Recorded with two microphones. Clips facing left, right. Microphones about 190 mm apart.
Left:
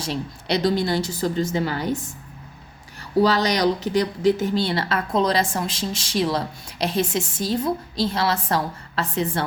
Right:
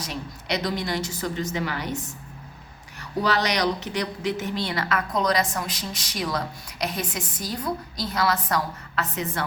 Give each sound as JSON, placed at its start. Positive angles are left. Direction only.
{"t": 0.0, "sound": "speech", "side_deg": 30}
{"t": 3.0, "sound": "a woman's voice", "side_deg": 30}